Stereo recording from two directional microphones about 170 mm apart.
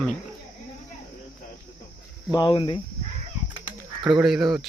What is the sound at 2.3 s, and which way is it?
Speech, 25° left (ahead or behind).